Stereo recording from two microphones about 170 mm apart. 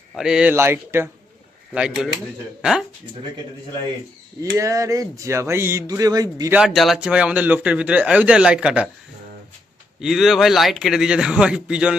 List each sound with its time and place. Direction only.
0.1 s speech: 5° right (ahead or behind)
0.5 s a man's voice: 15° right (ahead or behind)
4.5 s speech: 20° right (ahead or behind)
6.5 s a man's voice: 5° right (ahead or behind)
10.0 s a man's voice: centre (ahead or behind)